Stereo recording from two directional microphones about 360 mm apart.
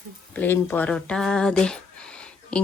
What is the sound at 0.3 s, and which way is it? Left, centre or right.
Speech, centre.